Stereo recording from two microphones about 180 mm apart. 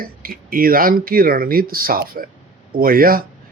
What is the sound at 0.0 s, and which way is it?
Speech, 55° right (ahead or behind).